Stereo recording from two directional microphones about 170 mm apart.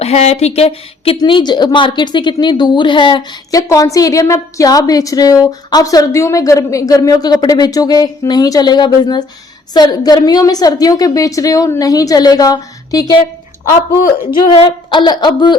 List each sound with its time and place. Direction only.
0.0 s a woman's voice: 40° left (ahead or behind); by 13.2 s 20° left (ahead or behind)
14.5 s a woman's voice: 25° left (ahead or behind)